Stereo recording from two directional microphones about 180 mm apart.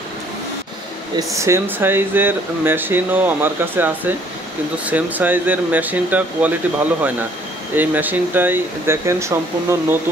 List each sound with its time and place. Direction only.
1.1 s speech: 15° right (ahead or behind)
7.7 s speech: 10° right (ahead or behind)